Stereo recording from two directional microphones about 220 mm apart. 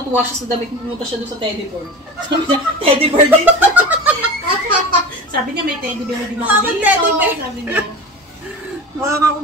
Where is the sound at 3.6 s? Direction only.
5° right (ahead or behind).